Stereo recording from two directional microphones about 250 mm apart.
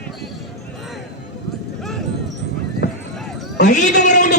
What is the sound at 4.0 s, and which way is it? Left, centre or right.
Speech, left.